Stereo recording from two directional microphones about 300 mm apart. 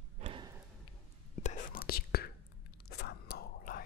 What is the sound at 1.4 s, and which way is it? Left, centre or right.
Whispering, left.